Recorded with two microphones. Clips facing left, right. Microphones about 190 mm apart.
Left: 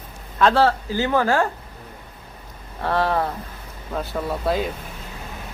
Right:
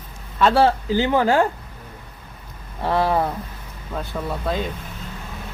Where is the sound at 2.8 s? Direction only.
10° right (ahead or behind).